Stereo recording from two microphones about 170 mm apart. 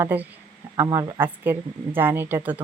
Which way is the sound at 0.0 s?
10° right (ahead or behind).